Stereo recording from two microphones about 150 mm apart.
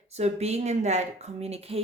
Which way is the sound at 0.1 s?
45° right (ahead or behind).